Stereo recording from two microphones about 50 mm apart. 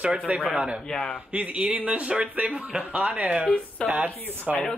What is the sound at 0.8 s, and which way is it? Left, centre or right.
Speech, centre.